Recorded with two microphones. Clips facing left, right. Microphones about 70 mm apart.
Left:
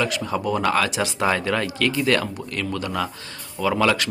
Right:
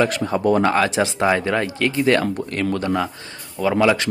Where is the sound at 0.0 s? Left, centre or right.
Right.